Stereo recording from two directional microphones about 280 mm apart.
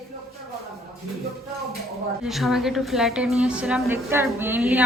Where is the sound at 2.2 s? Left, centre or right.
Centre.